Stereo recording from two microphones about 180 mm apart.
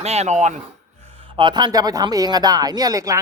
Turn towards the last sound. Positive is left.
turn(degrees=-20)  # may be behind; listen again after turning